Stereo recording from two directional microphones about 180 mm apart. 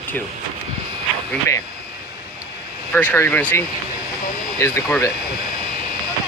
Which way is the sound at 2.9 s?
10° left (ahead or behind).